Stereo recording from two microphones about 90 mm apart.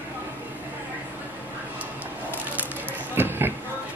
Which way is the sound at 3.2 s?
25° right (ahead or behind).